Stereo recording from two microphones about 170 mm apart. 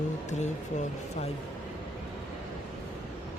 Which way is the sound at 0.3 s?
45° left (ahead or behind).